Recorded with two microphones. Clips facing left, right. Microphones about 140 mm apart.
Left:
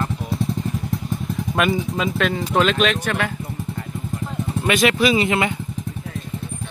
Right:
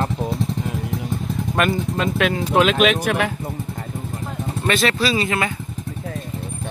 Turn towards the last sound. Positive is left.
turn(degrees=20)  # may be behind; listen again after turning